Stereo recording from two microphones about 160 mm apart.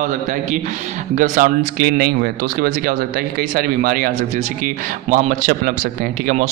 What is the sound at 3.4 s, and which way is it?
Speech, 65° right (ahead or behind).